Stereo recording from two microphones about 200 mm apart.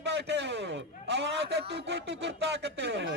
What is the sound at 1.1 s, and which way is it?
Speech, 55° right (ahead or behind).